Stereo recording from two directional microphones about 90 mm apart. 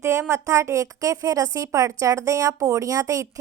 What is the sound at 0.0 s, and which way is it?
A woman's voice, 30° right (ahead or behind).